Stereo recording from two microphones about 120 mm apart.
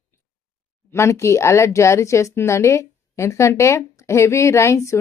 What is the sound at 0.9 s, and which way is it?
A woman's voice, 25° left (ahead or behind).